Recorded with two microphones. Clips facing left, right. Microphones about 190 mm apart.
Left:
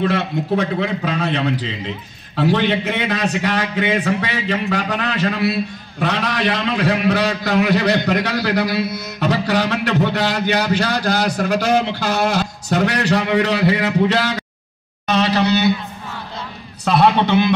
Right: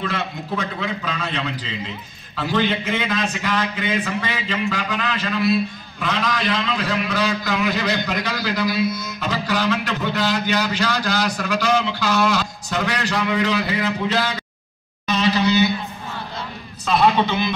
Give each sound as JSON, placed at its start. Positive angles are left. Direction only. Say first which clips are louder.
{"t": 0.0, "sound": "a man's voice", "louder": "left 7 dB", "side_deg": 60}
{"t": 15.0, "sound": "a sound", "louder": "left 2 dB", "side_deg": 70}
{"t": 16.8, "sound": "a man's voice", "louder": "left 3 dB", "side_deg": 70}